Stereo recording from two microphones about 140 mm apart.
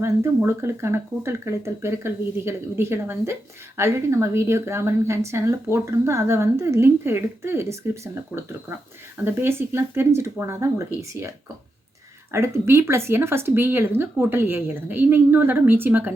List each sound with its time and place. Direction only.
0.0 s speech: 20° right (ahead or behind)
12.3 s speech: 20° right (ahead or behind)